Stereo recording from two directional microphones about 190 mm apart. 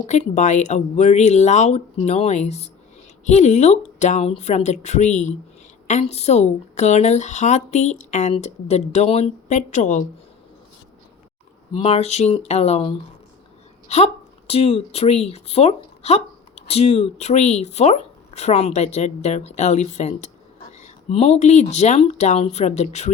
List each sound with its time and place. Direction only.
0.1 s speech: 40° left (ahead or behind)
11.7 s speech: 30° left (ahead or behind)